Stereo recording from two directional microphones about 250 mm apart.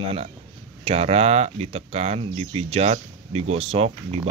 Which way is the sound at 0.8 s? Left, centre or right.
Right.